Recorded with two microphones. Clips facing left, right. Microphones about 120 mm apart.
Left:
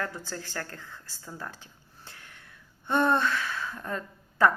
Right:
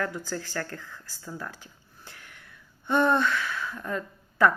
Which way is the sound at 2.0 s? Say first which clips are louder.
Right 1 dB; 25° left (ahead or behind).